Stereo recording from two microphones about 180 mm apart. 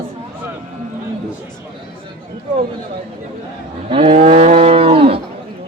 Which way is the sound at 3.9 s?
30° right (ahead or behind).